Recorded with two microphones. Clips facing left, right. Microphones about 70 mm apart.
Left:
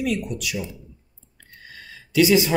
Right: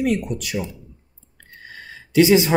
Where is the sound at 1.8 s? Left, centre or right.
Right.